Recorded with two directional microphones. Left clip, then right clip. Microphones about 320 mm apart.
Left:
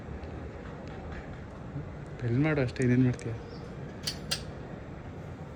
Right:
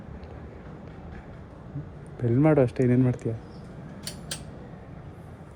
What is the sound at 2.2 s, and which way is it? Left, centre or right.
Speech, centre.